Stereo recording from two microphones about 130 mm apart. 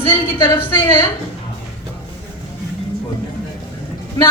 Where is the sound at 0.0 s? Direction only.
40° left (ahead or behind).